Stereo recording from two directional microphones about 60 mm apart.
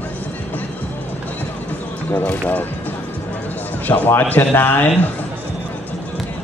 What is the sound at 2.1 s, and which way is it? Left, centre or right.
Speech, left.